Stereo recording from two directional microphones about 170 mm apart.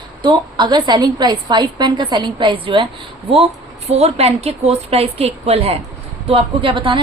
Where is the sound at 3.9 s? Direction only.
40° right (ahead or behind).